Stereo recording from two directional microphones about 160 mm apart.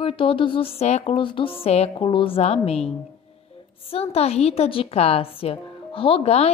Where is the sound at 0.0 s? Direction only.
35° left (ahead or behind).